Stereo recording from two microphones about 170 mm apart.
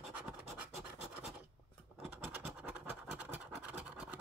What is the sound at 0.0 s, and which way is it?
Scratch, centre (ahead or behind).